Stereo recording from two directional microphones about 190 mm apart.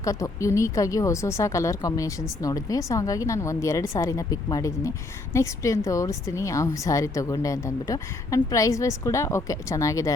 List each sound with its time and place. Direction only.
0.0 s a woman's voice: 15° left (ahead or behind)